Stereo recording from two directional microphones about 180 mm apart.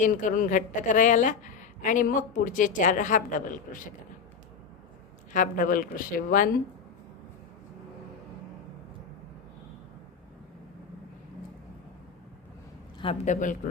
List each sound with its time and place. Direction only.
0.0 s a woman's voice: 45° left (ahead or behind)
5.3 s a woman's voice: 45° left (ahead or behind)
13.2 s a woman's voice: 45° left (ahead or behind)